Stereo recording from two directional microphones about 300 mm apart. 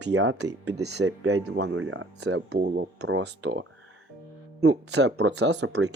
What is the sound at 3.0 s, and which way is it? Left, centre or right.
Speech, right.